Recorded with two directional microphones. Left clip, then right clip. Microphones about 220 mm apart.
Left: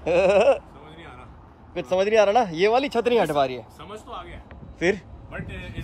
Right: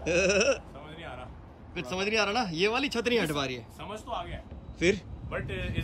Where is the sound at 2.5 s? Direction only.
35° right (ahead or behind).